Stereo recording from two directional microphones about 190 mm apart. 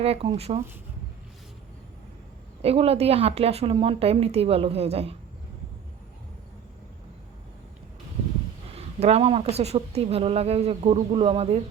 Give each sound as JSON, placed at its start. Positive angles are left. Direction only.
{"t": 0.0, "sound": "a woman's voice", "side_deg": -30}
{"t": 2.6, "sound": "a woman's voice", "side_deg": -30}
{"t": 8.7, "sound": "a woman's voice", "side_deg": -35}